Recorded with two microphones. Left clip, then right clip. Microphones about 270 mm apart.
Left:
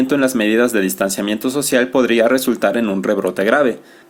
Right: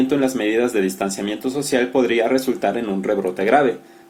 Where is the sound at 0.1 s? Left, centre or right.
Left.